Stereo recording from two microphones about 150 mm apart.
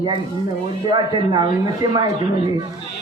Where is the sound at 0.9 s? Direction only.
30° right (ahead or behind).